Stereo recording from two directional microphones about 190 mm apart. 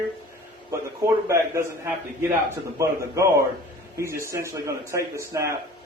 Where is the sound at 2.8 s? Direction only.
15° right (ahead or behind).